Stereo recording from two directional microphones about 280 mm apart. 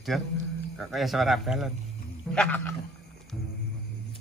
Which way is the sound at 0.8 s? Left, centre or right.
Centre.